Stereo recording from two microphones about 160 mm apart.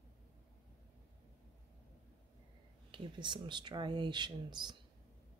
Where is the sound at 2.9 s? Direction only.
30° right (ahead or behind).